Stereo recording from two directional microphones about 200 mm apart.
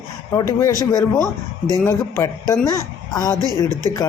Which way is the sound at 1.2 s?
20° right (ahead or behind).